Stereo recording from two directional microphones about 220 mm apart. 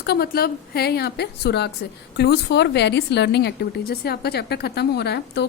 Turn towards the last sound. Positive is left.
turn(degrees=50)  # may be behind; listen again after turning